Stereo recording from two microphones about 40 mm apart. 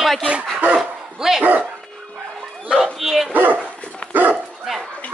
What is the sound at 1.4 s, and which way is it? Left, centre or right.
Speech, right.